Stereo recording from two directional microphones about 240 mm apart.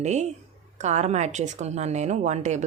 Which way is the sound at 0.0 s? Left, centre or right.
Right.